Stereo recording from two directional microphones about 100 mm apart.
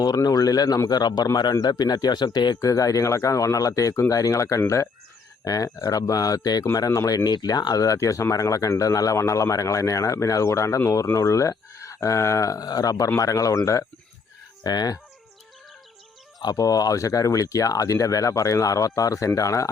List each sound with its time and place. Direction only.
0.0 s speech: 40° left (ahead or behind)
2.6 s speech: 35° left (ahead or behind)
14.6 s speech: 40° left (ahead or behind)
16.4 s speech: 40° left (ahead or behind)